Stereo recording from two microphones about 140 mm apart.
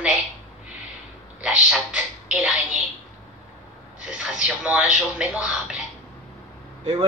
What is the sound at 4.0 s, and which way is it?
Speech, 5° right (ahead or behind).